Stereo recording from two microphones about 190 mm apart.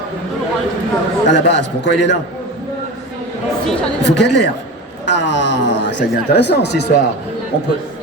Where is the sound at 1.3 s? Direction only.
65° left (ahead or behind).